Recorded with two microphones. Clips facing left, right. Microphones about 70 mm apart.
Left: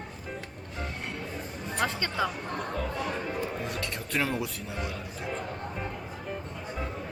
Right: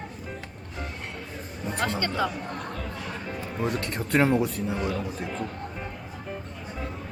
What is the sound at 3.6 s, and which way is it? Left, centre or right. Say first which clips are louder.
Speech: right 6 dB; right.